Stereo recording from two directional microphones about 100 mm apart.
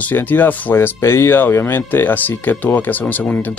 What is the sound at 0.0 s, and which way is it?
Speech, 20° left (ahead or behind).